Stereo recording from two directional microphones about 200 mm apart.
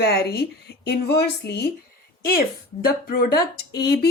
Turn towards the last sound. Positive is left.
turn(degrees=55)  # may be behind; listen again after turning